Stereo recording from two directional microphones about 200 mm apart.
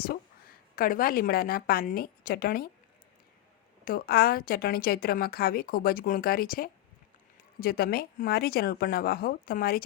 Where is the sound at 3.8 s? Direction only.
50° left (ahead or behind).